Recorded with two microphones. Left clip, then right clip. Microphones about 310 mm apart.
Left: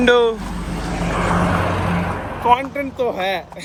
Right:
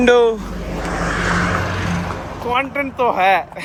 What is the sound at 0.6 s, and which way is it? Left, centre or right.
Vehicle, left.